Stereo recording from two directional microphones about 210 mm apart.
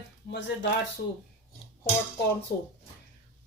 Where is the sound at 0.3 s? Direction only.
55° left (ahead or behind).